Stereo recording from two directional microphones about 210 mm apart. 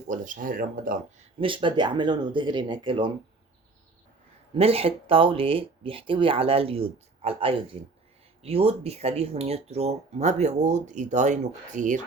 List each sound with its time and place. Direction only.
0.1 s speech: 40° right (ahead or behind)
1.4 s speech: 25° right (ahead or behind)
4.5 s speech: 25° right (ahead or behind)